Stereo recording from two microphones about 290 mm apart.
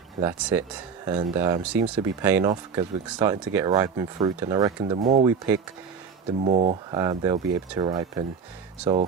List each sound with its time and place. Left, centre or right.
0.2 s speech: centre
4.9 s speech: right
6.4 s speech: right
6.9 s speech: centre